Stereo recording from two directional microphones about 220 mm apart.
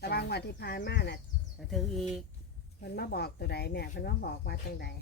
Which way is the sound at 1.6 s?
Centre (ahead or behind).